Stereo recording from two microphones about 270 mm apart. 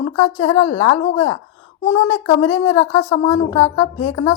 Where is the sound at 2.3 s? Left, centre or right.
Centre.